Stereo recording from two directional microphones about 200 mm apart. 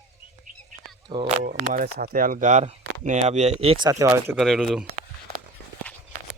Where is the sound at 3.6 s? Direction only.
25° right (ahead or behind).